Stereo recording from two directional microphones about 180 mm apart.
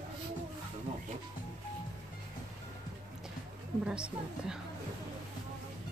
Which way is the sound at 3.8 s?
5° right (ahead or behind).